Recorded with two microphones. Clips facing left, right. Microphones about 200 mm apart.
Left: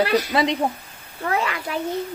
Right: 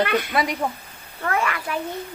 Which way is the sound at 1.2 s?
20° left (ahead or behind).